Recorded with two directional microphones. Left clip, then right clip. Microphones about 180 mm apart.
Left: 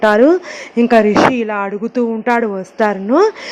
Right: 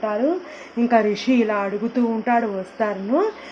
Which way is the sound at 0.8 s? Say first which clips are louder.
Left 8 dB; 35° left (ahead or behind).